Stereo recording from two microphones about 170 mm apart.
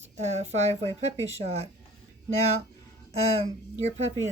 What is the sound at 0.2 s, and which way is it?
A woman's voice, 40° right (ahead or behind).